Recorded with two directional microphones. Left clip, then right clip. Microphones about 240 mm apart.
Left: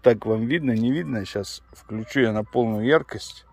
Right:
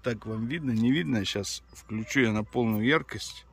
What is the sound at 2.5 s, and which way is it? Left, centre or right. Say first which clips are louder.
Speech: left 6 dB; right.